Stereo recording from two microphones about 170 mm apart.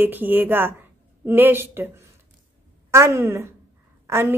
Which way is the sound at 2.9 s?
15° right (ahead or behind).